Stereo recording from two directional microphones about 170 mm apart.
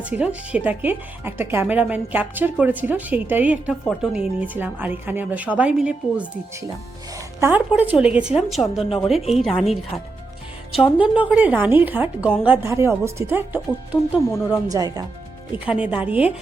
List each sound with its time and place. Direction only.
0.0 s speech: 5° right (ahead or behind)
7.3 s a woman's voice: 10° right (ahead or behind)
10.9 s speech: 5° right (ahead or behind)
14.3 s speech: 15° left (ahead or behind)
14.7 s speech: 20° right (ahead or behind)
15.5 s speech: 10° right (ahead or behind)